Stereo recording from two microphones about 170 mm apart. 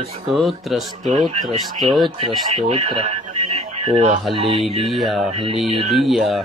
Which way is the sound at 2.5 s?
35° right (ahead or behind).